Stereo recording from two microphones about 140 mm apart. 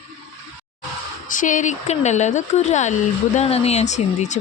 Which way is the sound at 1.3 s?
65° left (ahead or behind).